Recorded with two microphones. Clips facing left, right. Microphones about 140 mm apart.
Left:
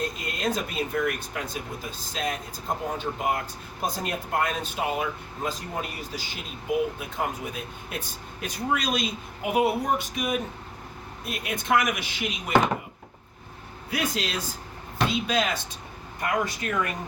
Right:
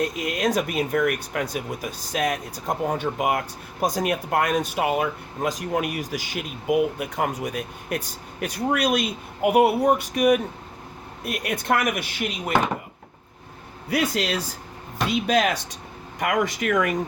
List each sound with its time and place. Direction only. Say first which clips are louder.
0.1 s speech: right 5 dB; 75° right (ahead or behind); by 12.5 s 55° right (ahead or behind)
13.9 s speech: right 5 dB; 65° right (ahead or behind)
16.2 s speech: right 4 dB; 90° right